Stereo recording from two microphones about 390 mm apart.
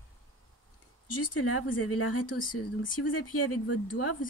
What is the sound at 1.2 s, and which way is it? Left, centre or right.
Speech, left.